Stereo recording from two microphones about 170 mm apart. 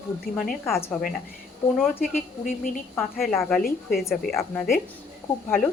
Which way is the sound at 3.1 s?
Centre (ahead or behind).